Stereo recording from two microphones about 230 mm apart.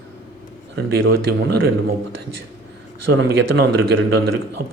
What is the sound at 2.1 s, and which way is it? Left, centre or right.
Speech, right.